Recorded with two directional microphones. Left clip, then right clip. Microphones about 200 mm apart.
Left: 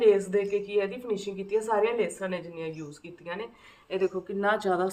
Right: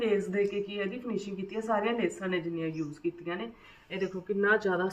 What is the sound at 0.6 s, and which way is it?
A man's voice, 25° left (ahead or behind).